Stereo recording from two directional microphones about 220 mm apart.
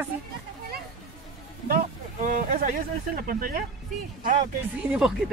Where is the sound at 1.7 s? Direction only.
40° right (ahead or behind).